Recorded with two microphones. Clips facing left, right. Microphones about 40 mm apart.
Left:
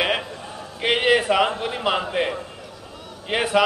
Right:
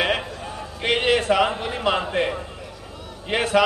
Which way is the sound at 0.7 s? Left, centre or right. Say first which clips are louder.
Left 2 dB; centre.